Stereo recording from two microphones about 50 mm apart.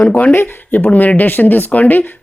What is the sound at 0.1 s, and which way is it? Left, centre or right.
A woman's voice, left.